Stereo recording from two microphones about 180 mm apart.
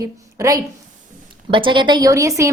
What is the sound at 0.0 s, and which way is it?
A woman's voice, 20° right (ahead or behind).